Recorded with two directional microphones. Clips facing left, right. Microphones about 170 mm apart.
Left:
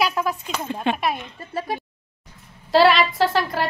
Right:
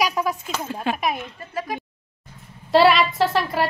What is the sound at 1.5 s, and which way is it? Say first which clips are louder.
Speech: left 2 dB; 30° left (ahead or behind).